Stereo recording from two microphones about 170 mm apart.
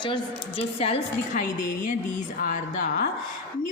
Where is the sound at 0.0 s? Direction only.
30° left (ahead or behind); by 1.9 s 50° left (ahead or behind).